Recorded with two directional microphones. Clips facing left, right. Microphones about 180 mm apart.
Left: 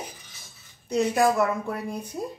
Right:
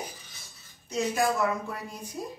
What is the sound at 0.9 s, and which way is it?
Speech, 60° left (ahead or behind).